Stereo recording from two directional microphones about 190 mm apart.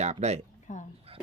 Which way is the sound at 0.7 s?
40° left (ahead or behind).